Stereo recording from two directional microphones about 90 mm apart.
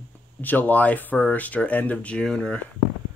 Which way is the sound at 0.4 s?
20° left (ahead or behind).